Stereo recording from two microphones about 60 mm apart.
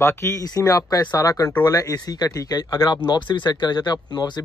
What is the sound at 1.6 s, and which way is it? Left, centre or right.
Speech, left.